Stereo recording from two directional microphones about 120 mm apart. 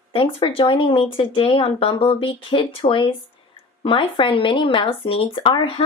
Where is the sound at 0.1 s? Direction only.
50° left (ahead or behind).